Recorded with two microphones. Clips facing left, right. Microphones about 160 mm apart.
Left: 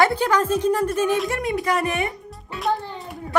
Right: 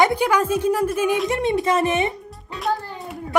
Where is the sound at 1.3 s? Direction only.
25° right (ahead or behind).